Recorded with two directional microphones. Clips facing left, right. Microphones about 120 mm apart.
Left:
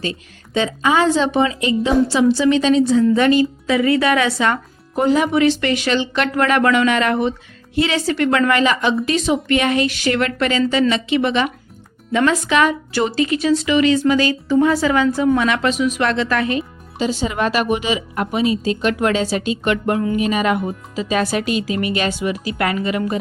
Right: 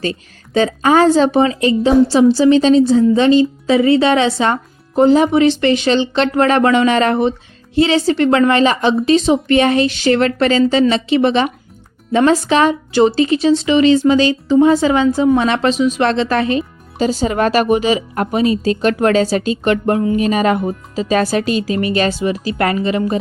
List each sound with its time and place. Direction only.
0.0 s a woman's voice: 40° right (ahead or behind)
17.0 s a woman's voice: 40° right (ahead or behind)